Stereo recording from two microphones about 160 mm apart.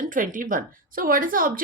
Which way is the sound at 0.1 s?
55° right (ahead or behind).